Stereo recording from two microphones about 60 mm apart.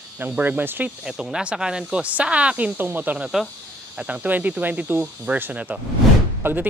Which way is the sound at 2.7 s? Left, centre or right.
Right.